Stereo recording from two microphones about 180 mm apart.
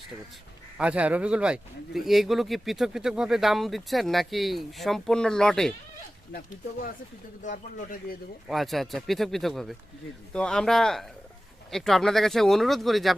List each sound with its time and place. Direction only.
0.8 s speech: 5° right (ahead or behind)
6.3 s speech: 60° left (ahead or behind)
7.4 s speech: 45° left (ahead or behind)
8.4 s speech: centre (ahead or behind)